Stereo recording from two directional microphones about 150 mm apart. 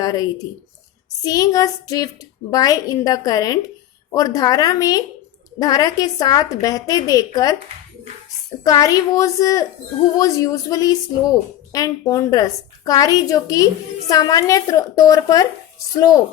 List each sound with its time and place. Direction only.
0.0 s a woman's voice: 25° left (ahead or behind)
8.6 s speech: 25° left (ahead or behind)